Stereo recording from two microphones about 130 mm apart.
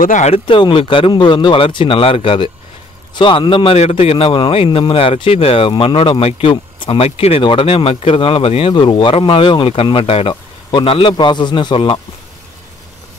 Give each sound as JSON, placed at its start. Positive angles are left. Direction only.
{"t": 0.0, "sound": "speech", "side_deg": 80}
{"t": 0.3, "sound": "speech", "side_deg": 40}